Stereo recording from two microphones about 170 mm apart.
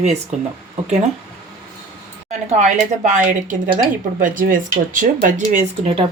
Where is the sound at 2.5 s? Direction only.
45° right (ahead or behind).